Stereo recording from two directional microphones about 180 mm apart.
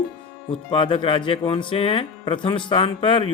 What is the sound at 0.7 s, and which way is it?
A man's voice, 30° left (ahead or behind).